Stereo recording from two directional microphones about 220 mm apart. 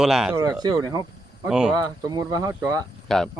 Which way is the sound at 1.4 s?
5° right (ahead or behind).